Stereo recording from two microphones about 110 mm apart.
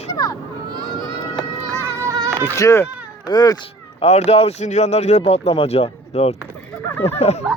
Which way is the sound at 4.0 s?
80° left.